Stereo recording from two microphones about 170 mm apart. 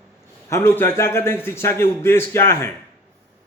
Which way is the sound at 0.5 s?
15° left (ahead or behind).